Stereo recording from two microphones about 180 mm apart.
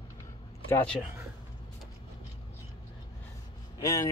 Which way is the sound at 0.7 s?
10° left (ahead or behind).